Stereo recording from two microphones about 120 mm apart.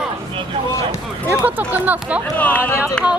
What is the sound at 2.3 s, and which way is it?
Speech, 15° left (ahead or behind).